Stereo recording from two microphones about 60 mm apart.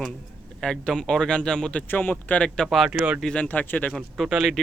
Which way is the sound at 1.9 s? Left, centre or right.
Left.